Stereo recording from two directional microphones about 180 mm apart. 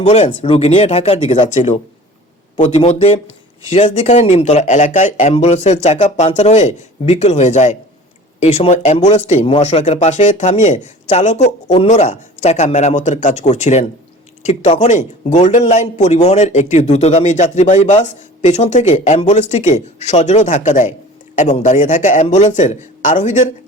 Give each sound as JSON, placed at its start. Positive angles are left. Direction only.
{"t": 0.0, "sound": "speech", "side_deg": 35}